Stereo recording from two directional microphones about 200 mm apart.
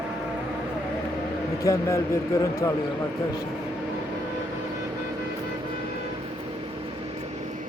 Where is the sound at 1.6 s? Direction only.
15° left (ahead or behind).